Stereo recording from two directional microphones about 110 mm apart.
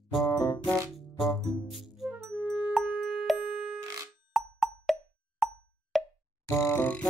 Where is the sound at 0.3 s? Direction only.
35° left (ahead or behind).